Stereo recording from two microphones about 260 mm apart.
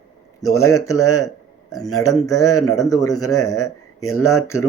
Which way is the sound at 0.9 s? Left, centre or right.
Left.